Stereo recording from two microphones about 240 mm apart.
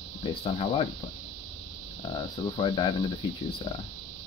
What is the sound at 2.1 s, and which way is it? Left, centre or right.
Speech, centre.